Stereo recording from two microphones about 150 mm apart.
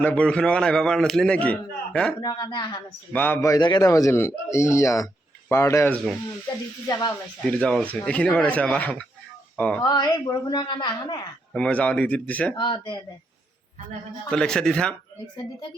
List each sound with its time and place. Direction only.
0.0 s a man's voice: 10° left (ahead or behind)
2.2 s a man's voice: 25° left (ahead or behind)
3.1 s a man's voice: 10° left (ahead or behind)
7.1 s a man's voice: 10° left (ahead or behind)
9.8 s a man's voice: 30° left (ahead or behind)
11.5 s a man's voice: 10° left (ahead or behind)
12.5 s speech: 35° left (ahead or behind)
14.3 s a man's voice: 5° left (ahead or behind)